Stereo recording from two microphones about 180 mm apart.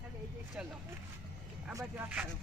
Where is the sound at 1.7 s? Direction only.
20° right (ahead or behind).